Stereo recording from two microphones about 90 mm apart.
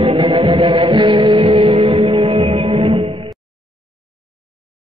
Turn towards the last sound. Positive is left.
turn(degrees=-90)